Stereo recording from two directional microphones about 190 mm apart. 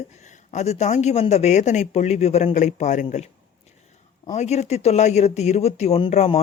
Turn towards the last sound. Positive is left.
turn(degrees=30)  # may be behind; listen again after turning